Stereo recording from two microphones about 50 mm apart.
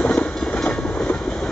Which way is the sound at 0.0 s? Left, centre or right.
Left.